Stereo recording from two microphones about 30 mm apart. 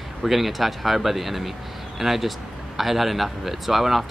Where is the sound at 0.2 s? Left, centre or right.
Centre.